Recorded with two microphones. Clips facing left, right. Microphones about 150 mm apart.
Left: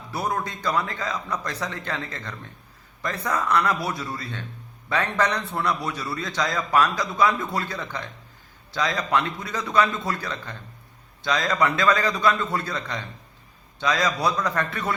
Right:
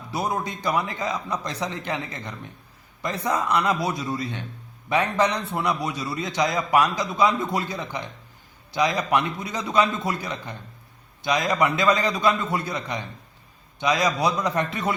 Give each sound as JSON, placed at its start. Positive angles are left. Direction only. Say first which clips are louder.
{"t": 0.1, "sound": "a man's voice", "louder": "right 1 dB", "side_deg": -15}